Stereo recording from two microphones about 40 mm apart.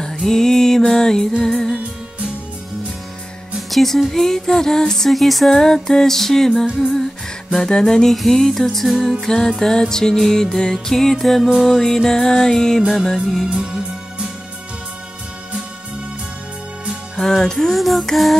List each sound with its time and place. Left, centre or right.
0.2 s music: centre
3.7 s music: centre
5.1 s music: centre
13.5 s music: right
17.2 s music: centre